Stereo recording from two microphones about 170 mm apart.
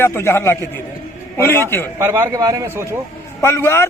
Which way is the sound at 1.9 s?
15° right (ahead or behind).